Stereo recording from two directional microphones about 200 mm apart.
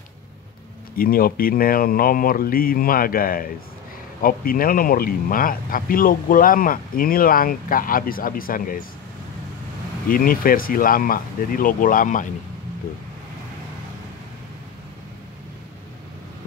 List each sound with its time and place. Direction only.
0.9 s speech: 45° left (ahead or behind)
10.0 s speech: 45° left (ahead or behind)